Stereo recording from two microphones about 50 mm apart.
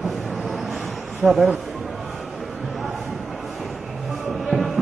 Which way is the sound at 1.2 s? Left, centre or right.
Centre.